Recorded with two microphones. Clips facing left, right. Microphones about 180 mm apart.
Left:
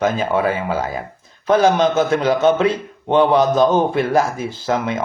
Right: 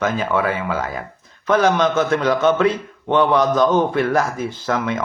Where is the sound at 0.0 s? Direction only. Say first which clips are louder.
Left 2 dB; 30° left (ahead or behind).